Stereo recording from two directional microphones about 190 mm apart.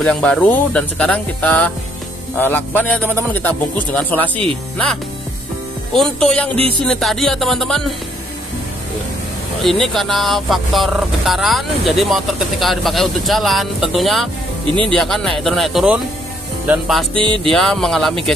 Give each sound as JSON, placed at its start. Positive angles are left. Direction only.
{"t": 0.0, "sound": "a man's voice", "side_deg": 5}
{"t": 5.9, "sound": "speech", "side_deg": 5}
{"t": 9.6, "sound": "speech", "side_deg": 0}
{"t": 17.1, "sound": "music", "side_deg": -25}
{"t": 17.4, "sound": "speech", "side_deg": 0}